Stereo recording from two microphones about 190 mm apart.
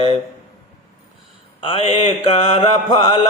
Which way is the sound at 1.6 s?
30° left (ahead or behind).